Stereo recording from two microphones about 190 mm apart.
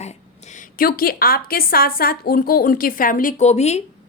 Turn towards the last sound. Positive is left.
turn(degrees=35)  # may be behind; listen again after turning